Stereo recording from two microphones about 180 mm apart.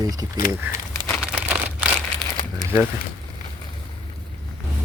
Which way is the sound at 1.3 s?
5° right (ahead or behind).